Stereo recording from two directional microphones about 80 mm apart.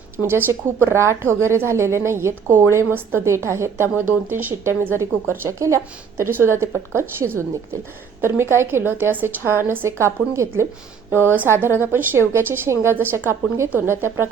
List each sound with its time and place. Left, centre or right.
0.2 s a woman's voice: right
11.1 s a woman's voice: right